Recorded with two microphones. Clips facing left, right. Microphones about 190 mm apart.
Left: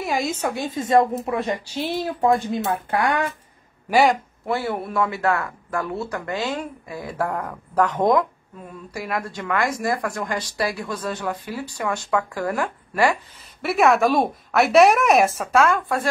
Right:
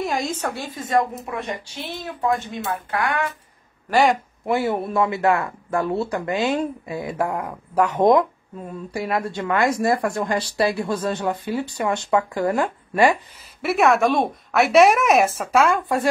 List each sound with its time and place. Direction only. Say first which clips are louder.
0.0 s a sound: even; 5° left (ahead or behind)
0.6 s speech: left 4 dB; 25° left (ahead or behind)
3.9 s a woman's voice: even; centre (ahead or behind)
4.5 s speech: right 3 dB; 20° right (ahead or behind)
8.9 s speech: right 3 dB; 25° right (ahead or behind)
13.6 s a woman's voice: even; centre (ahead or behind)
15.8 s speech: right 2 dB; 20° right (ahead or behind)